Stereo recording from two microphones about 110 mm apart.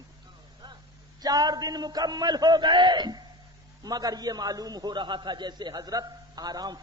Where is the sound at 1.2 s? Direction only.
35° right (ahead or behind).